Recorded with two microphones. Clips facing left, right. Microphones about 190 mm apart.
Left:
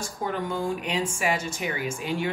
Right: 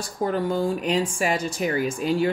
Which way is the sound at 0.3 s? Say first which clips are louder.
Right 4 dB; 35° right (ahead or behind).